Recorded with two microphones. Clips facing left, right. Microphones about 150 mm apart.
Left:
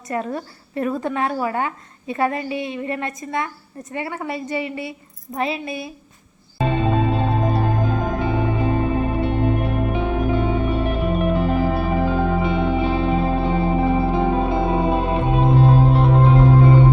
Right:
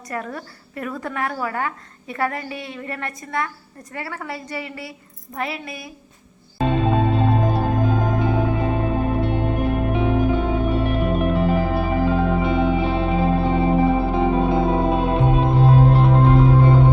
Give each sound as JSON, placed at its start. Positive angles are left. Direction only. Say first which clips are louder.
{"t": 0.1, "sound": "a woman's voice", "louder": "left 4 dB", "side_deg": 25}
{"t": 6.6, "sound": "music", "louder": "right 1 dB", "side_deg": 0}